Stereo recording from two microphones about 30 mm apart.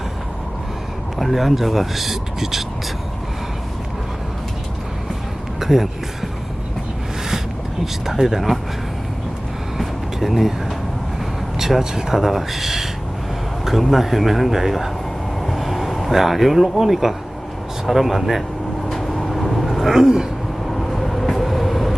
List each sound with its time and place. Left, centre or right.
1.2 s speech: centre
5.5 s a sound: centre
8.0 s speech: centre
9.7 s vehicle: centre
11.8 s speech: centre
13.9 s speech: centre
18.9 s vehicle: centre
19.9 s a sound: centre
20.7 s vehicle: centre